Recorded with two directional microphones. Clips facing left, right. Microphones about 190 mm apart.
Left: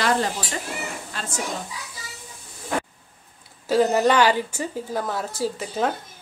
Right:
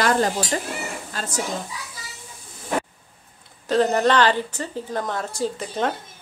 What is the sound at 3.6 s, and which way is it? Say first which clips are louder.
A woman's voice: even; 5° left (ahead or behind).